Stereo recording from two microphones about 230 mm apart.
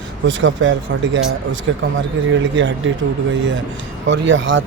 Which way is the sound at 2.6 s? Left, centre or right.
Right.